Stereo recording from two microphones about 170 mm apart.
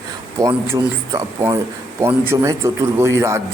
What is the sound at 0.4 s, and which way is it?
A man's voice, 20° right (ahead or behind).